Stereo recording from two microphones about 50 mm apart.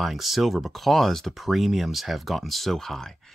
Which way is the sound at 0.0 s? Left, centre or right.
Centre.